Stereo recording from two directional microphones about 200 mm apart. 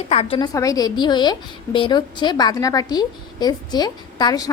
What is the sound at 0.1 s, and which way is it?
A woman's voice, 30° left (ahead or behind).